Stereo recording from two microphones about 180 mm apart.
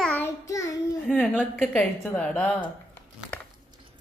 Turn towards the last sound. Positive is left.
turn(degrees=5)  # may be behind; listen again after turning